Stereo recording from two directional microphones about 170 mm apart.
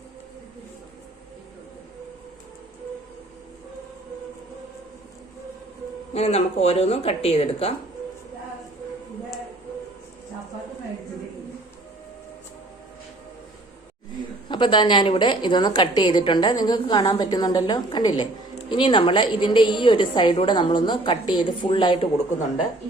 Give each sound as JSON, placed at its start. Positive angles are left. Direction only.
{"t": 6.1, "sound": "speech", "side_deg": 35}
{"t": 14.5, "sound": "a woman's voice", "side_deg": 30}